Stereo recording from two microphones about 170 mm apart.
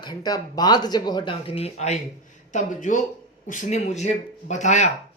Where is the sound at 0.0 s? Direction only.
25° left (ahead or behind); by 4.9 s 45° left (ahead or behind).